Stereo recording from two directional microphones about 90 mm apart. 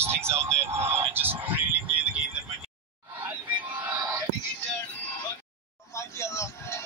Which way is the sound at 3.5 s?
15° right (ahead or behind).